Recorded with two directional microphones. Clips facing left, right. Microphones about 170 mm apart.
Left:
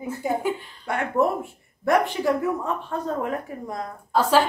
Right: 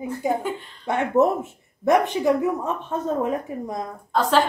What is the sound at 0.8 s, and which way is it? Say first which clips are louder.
Speech: right 4 dB; 20° right (ahead or behind).